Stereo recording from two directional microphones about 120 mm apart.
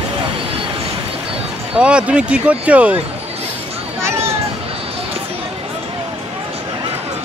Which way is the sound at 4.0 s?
20° right (ahead or behind).